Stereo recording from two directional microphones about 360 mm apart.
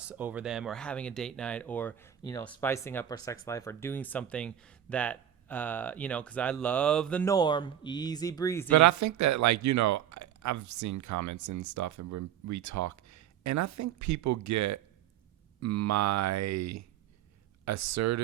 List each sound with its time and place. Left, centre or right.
0.0 s speech: centre
8.7 s speech: right